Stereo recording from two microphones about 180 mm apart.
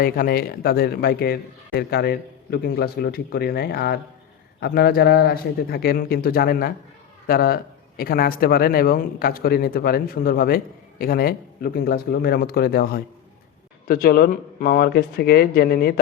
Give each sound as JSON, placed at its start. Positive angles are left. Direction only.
{"t": 0.0, "sound": "speech", "side_deg": 55}